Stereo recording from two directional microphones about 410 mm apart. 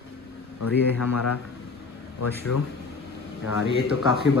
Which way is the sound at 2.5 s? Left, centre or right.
Left.